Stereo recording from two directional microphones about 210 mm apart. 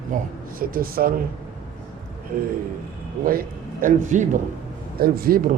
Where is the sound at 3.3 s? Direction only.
40° right (ahead or behind).